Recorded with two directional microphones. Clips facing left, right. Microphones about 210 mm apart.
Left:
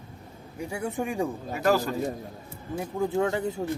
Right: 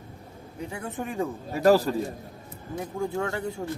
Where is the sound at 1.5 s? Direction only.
35° right (ahead or behind).